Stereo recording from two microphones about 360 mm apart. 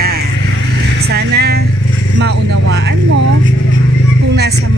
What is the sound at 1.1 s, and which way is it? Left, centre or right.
Vehicle, right.